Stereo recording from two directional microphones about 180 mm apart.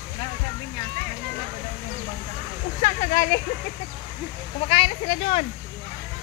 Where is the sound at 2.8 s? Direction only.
50° left (ahead or behind).